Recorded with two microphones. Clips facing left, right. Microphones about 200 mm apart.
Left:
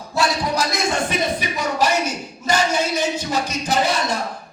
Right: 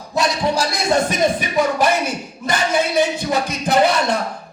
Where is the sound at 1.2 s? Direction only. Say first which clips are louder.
Right 6 dB; 50° right (ahead or behind).